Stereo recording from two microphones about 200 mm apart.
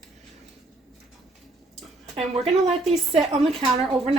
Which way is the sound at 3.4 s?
30° right (ahead or behind).